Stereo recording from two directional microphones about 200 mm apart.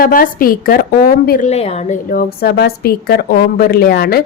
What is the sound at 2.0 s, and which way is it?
A woman's voice, 50° left (ahead or behind).